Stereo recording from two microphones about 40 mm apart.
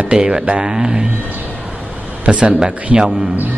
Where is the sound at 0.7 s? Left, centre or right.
Centre.